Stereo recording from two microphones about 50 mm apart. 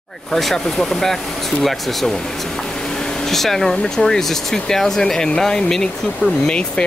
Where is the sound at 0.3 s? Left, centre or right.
Centre.